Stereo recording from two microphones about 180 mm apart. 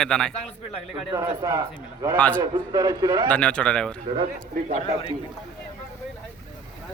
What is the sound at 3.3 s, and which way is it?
Speech, 5° left (ahead or behind).